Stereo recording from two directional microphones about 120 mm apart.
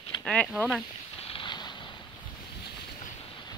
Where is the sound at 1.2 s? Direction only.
45° left (ahead or behind).